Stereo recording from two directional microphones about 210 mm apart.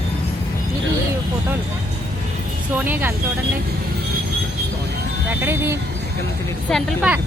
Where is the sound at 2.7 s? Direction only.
10° right (ahead or behind).